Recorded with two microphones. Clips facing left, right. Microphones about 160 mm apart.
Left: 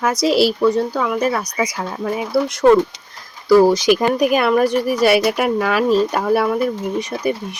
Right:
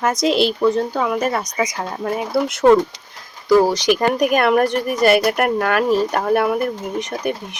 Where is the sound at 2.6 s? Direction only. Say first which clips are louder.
Even; 15° right (ahead or behind).